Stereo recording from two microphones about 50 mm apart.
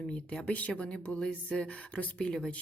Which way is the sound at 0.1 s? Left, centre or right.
Left.